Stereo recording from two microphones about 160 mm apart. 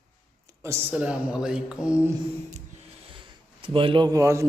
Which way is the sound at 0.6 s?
15° right (ahead or behind).